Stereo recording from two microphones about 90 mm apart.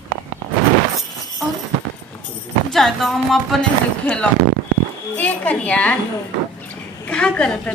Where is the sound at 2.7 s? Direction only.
Centre (ahead or behind).